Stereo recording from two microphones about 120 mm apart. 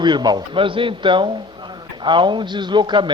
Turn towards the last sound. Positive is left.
turn(degrees=-40)  # may be behind; listen again after turning